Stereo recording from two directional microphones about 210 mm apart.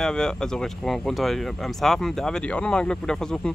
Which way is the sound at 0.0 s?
5° left (ahead or behind).